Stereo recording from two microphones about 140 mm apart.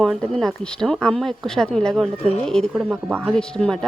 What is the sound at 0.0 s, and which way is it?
Speech, centre (ahead or behind).